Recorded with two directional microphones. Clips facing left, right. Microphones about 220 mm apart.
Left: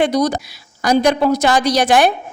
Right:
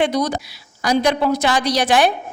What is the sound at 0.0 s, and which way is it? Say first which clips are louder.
A woman's voice: left 3 dB; 40° left (ahead or behind).